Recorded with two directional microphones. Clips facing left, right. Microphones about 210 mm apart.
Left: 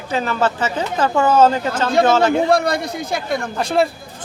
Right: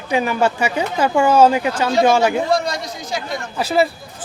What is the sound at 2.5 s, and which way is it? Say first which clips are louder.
Speech: left 3 dB; 60° left (ahead or behind).